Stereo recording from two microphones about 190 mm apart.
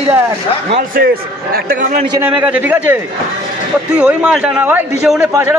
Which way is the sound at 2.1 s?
10° right (ahead or behind).